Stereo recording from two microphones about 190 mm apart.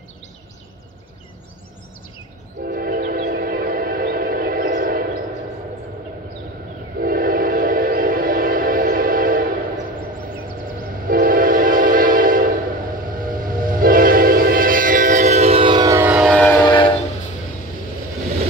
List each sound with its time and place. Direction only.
2.6 s train: 50° right (ahead or behind)
7.0 s train: 50° right (ahead or behind)
11.1 s train: 50° right (ahead or behind); by 16.3 s 10° right (ahead or behind)
16.3 s train: 5° left (ahead or behind)
16.6 s train: 25° left (ahead or behind)